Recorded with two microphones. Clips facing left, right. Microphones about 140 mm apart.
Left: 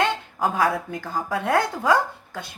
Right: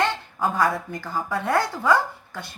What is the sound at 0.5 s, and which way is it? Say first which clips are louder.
Speech: even; 65° left (ahead or behind).